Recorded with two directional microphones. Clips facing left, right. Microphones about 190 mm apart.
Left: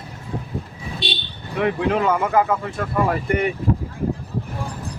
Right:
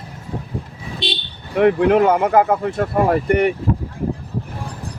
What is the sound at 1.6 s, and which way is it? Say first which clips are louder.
Speech: right 7 dB; 55° right (ahead or behind).